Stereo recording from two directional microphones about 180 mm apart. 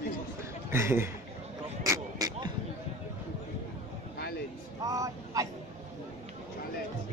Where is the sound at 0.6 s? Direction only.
15° right (ahead or behind).